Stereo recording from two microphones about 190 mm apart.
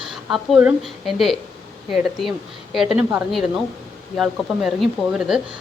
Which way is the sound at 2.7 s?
Centre (ahead or behind).